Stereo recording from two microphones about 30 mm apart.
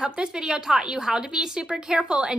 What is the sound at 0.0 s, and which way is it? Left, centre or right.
Speech, right.